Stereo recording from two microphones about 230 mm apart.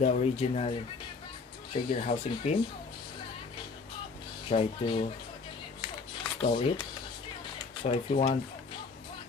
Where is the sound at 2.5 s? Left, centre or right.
Left.